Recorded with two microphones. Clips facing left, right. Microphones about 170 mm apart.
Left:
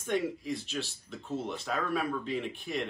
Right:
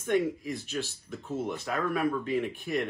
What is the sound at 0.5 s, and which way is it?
Speech, 50° right (ahead or behind).